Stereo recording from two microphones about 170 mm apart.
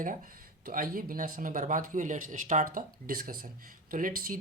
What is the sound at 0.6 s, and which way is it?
Speech, 55° right (ahead or behind).